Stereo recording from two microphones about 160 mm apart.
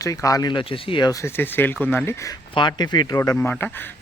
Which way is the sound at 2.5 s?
25° left (ahead or behind).